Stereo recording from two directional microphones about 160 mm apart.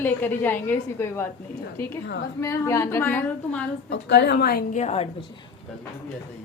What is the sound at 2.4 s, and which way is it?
A woman's voice, 20° left (ahead or behind).